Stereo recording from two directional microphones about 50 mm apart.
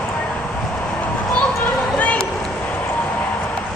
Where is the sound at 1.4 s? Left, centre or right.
Left.